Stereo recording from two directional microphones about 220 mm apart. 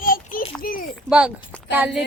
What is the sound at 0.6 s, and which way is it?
Speech, 40° left (ahead or behind).